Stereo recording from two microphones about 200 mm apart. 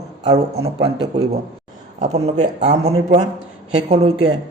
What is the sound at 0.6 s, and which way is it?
A man's voice, 30° right (ahead or behind).